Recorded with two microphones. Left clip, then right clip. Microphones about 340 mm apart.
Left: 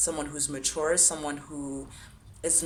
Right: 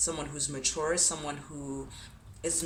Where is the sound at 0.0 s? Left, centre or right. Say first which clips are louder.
Left 3 dB; centre.